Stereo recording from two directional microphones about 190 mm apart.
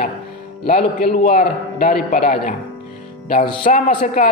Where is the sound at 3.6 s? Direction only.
45° left (ahead or behind).